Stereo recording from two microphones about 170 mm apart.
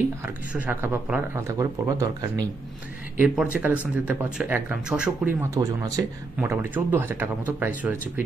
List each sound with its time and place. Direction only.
0.2 s speech: 10° right (ahead or behind)
3.2 s speech: 10° right (ahead or behind)